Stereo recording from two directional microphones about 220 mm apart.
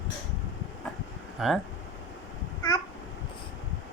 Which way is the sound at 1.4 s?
Centre (ahead or behind).